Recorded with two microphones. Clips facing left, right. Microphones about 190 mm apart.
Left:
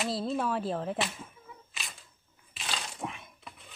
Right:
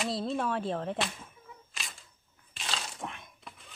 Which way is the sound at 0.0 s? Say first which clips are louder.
Left 1 dB; centre (ahead or behind).